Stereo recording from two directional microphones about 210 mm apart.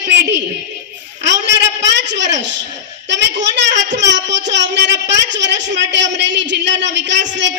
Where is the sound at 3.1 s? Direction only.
55° right (ahead or behind).